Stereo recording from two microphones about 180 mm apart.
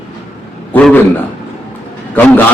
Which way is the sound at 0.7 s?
10° left (ahead or behind).